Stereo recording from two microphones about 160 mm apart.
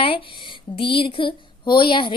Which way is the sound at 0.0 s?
35° left (ahead or behind).